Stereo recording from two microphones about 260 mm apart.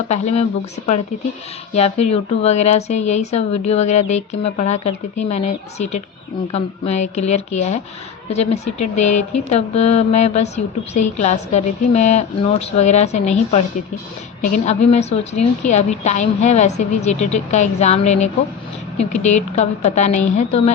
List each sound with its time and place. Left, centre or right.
0.1 s a woman's voice: left
1.7 s a woman's voice: left
8.8 s speech: left
9.5 s a woman's voice: left